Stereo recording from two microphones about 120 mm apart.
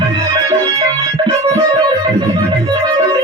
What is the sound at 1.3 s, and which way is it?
Music, 30° right (ahead or behind).